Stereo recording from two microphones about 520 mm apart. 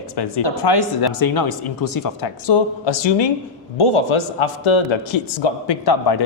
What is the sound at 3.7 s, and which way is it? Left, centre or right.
A man's voice, left.